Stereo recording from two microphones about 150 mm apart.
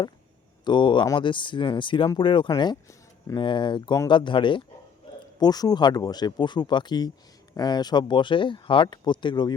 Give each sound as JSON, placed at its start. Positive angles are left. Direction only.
{"t": 0.6, "sound": "speech", "side_deg": 30}